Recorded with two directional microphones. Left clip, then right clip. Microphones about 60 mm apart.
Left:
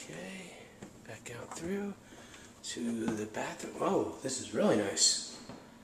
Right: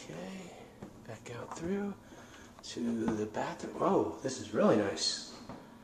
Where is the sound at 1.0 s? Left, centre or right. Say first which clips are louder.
Right 1 dB; centre.